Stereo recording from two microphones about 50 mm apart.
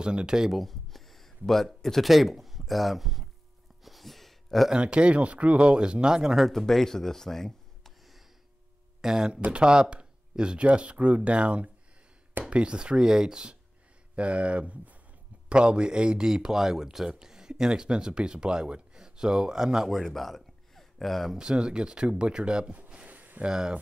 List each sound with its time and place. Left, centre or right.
0.0 s speech: centre
0.5 s a sound: centre
1.8 s speech: centre
3.8 s a sound: centre
4.6 s speech: centre
6.4 s speech: centre
9.0 s speech: centre
19.9 s speech: centre
21.4 s speech: centre
22.8 s a sound: right
23.4 s speech: centre